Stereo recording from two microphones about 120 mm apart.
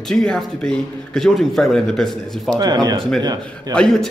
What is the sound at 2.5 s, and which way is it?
Speech, 35° right (ahead or behind).